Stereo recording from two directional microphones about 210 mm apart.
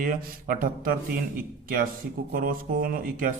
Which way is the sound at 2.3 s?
40° right (ahead or behind).